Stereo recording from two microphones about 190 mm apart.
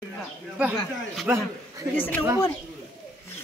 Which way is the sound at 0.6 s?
10° right (ahead or behind).